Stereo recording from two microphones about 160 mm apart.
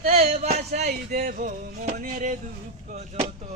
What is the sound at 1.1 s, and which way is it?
Speech, 60° right (ahead or behind).